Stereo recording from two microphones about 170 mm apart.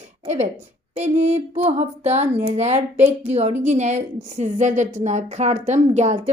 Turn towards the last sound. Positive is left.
turn(degrees=-45)  # may be behind; listen again after turning